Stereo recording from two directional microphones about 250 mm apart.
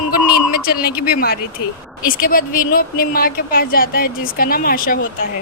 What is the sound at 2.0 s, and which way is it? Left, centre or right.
Speech, left.